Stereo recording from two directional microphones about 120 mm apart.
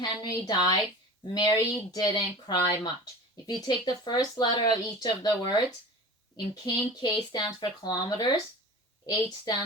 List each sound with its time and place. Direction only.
0.0 s a woman's voice: 35° left (ahead or behind)